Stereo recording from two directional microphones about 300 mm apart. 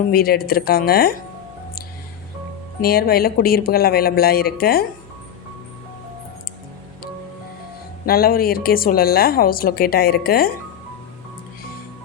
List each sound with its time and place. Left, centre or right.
0.1 s speech: left
2.8 s a woman's voice: left
8.0 s a woman's voice: left